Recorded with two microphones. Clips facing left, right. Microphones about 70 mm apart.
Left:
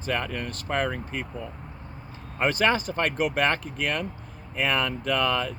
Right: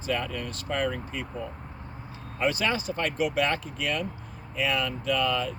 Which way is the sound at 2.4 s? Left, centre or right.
Left.